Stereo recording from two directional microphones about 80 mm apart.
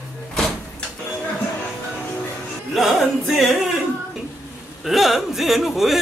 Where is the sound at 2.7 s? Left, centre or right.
Centre.